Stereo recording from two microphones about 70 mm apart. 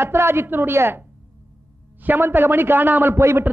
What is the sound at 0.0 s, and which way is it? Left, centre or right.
A man's voice, right.